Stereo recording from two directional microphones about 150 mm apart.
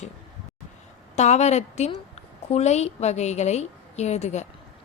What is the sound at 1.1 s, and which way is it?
A woman's voice, 50° left (ahead or behind).